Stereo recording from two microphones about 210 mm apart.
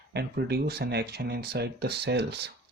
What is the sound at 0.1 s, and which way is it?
Speech, 50° right (ahead or behind).